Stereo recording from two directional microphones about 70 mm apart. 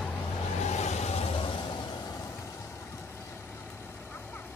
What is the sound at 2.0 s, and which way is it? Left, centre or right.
Vehicle, left.